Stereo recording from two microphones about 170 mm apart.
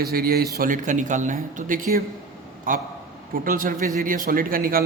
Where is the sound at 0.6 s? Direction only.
50° right (ahead or behind).